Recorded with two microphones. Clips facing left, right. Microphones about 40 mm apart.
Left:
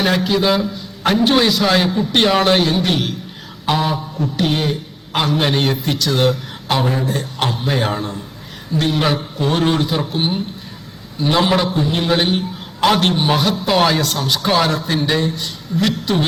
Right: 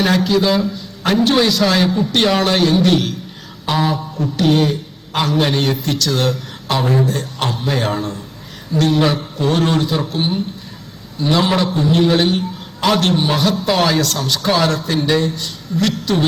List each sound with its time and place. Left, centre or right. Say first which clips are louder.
0.0 s a man's voice: right 1 dB; centre
0.3 s a man's voice: right 1 dB; centre